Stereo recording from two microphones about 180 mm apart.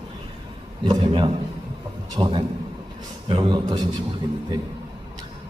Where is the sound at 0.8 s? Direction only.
25° right (ahead or behind).